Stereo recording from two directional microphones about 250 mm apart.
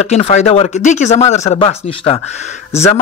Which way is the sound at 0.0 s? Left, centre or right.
Left.